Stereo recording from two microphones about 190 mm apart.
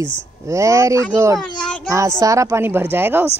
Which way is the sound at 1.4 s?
5° left (ahead or behind).